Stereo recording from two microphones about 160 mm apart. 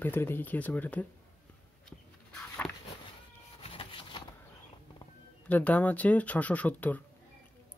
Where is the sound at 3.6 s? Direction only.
35° left (ahead or behind).